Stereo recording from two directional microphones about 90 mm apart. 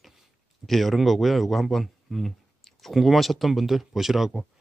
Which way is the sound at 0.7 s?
Centre (ahead or behind).